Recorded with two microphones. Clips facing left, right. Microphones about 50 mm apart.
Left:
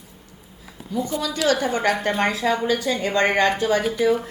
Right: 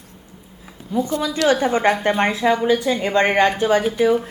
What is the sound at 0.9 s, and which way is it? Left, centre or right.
Speech, right.